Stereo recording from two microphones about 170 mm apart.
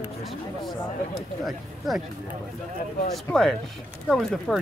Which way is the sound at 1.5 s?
Centre (ahead or behind).